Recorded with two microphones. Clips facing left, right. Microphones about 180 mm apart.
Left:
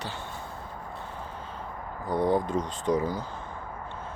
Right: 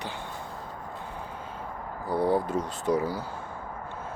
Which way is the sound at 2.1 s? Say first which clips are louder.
Even; 10° right (ahead or behind).